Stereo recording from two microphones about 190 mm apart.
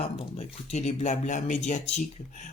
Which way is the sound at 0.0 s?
35° left (ahead or behind).